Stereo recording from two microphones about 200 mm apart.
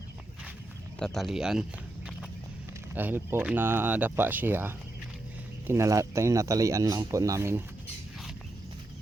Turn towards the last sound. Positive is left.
turn(degrees=-15)  # may be behind; listen again after turning